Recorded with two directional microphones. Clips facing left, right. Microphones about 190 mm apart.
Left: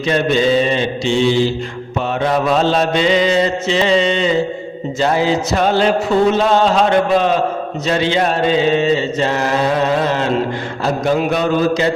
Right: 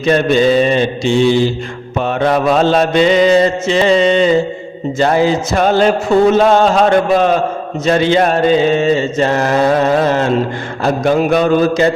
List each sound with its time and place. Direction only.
0.0 s mantra: 50° right (ahead or behind)